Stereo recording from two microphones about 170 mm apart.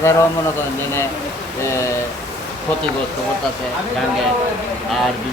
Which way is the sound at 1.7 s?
15° left (ahead or behind).